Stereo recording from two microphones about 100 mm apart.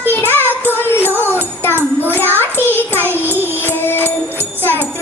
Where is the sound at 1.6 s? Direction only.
20° left (ahead or behind).